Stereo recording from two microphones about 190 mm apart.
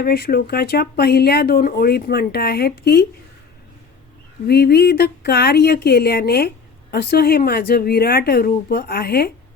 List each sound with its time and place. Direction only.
0.0 s speech: 55° left (ahead or behind)
4.4 s a woman's voice: 55° left (ahead or behind)